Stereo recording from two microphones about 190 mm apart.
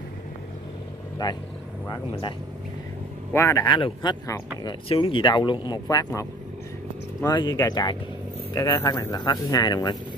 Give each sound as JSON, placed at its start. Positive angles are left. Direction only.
{"t": 1.2, "sound": "speech", "side_deg": 20}
{"t": 3.3, "sound": "speech", "side_deg": 15}